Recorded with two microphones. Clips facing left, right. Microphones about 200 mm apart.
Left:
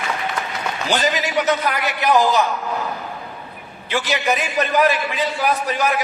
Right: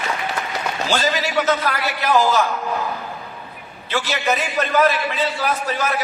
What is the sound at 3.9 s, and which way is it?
A man's voice, 15° left (ahead or behind).